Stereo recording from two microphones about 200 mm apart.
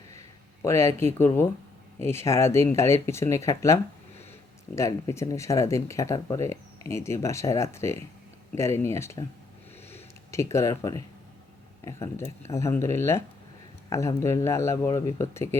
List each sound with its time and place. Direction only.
0.6 s speech: 15° left (ahead or behind)
9.9 s a sound: 15° left (ahead or behind)
11.9 s speech: 15° left (ahead or behind)